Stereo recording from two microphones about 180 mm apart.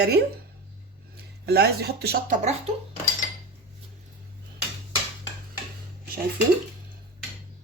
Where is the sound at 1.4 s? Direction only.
65° right (ahead or behind).